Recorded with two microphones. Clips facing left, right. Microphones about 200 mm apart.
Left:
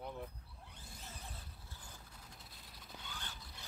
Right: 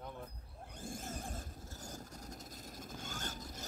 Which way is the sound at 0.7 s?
50° right (ahead or behind).